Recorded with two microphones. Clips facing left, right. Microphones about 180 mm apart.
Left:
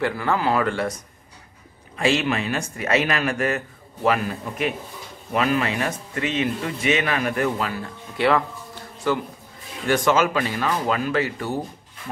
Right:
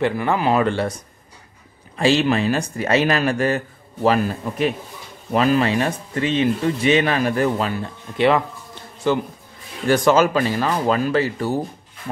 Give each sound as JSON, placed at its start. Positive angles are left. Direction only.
{"t": 0.0, "sound": "speech", "side_deg": -20}
{"t": 2.0, "sound": "speech", "side_deg": -35}
{"t": 9.8, "sound": "speech", "side_deg": -35}